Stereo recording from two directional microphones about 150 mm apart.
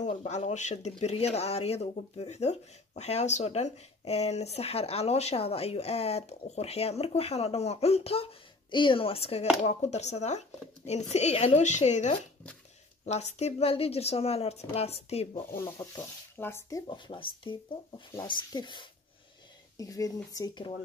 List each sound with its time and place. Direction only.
0.0 s speech: 50° left (ahead or behind)
15.6 s speech: 25° left (ahead or behind)
16.3 s speech: 15° left (ahead or behind)
17.1 s speech: 35° left (ahead or behind)